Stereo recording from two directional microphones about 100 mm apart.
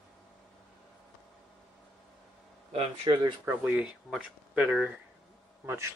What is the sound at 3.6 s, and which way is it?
Speech, 10° right (ahead or behind).